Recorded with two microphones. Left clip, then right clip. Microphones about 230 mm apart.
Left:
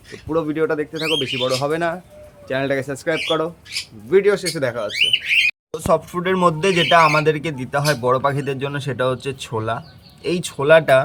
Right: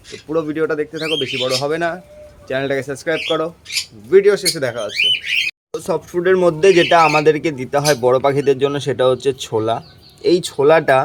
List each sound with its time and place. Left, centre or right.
0.3 s speech: centre